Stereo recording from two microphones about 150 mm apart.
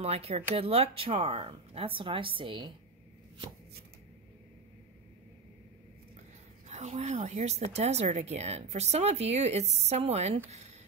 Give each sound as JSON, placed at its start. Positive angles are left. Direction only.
{"t": 0.0, "sound": "speech", "side_deg": -40}
{"t": 6.7, "sound": "speech", "side_deg": -50}